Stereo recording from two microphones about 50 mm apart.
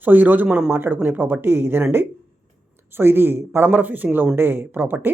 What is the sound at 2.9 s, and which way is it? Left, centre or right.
Speech, right.